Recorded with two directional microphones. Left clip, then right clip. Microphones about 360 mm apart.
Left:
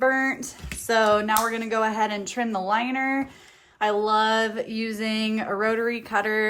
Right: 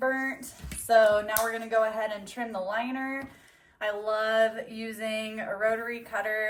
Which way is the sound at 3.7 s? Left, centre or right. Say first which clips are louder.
Left 8 dB; centre.